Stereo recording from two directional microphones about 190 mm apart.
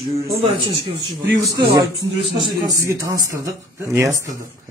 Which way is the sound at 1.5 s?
20° right (ahead or behind).